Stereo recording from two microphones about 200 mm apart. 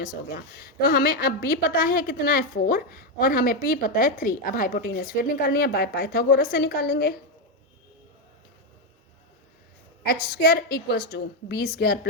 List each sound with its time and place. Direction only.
0.3 s a woman's voice: 45° left (ahead or behind)
10.0 s a woman's voice: 50° left (ahead or behind)